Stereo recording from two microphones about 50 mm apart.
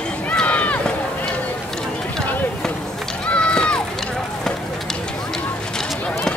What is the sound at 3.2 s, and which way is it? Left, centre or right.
Run, left.